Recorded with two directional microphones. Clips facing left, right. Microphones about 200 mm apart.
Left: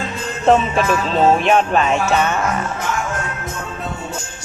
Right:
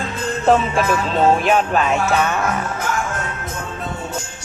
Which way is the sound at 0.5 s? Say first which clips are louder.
Left 2 dB; 5° right (ahead or behind).